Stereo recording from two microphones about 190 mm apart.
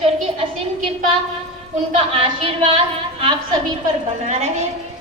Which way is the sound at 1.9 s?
30° right (ahead or behind).